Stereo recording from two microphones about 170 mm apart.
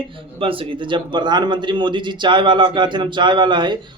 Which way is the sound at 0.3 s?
30° right (ahead or behind).